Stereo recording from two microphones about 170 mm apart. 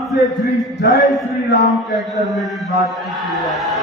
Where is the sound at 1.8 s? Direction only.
Centre (ahead or behind).